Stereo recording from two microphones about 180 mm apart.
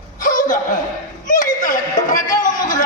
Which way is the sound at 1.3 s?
45° left (ahead or behind).